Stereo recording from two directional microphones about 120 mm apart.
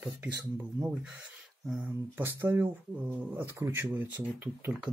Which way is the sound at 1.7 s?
10° right (ahead or behind).